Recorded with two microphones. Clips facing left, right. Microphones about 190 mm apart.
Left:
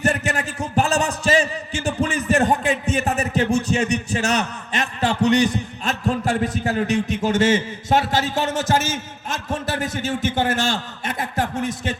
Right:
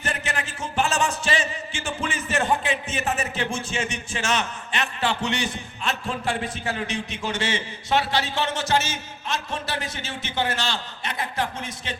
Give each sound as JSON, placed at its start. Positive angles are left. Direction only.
{"t": 0.0, "sound": "a man's voice", "side_deg": 45}